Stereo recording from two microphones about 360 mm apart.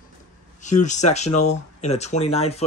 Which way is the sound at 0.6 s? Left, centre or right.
Centre.